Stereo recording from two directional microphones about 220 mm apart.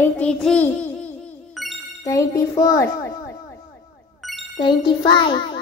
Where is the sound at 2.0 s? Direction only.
15° left (ahead or behind).